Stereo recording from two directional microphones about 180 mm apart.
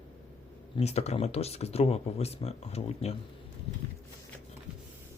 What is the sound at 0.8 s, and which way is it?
Speech, 35° left (ahead or behind).